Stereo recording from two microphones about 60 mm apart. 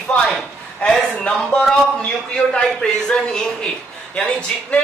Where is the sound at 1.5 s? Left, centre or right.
Centre.